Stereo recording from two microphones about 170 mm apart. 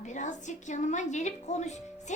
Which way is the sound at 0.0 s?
45° left (ahead or behind).